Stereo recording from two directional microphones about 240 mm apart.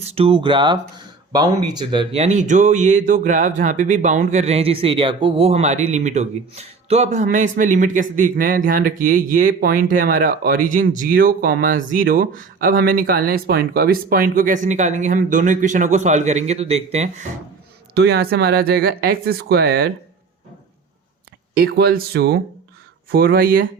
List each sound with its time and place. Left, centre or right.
0.0 s speech: right
17.9 s speech: right
21.5 s speech: right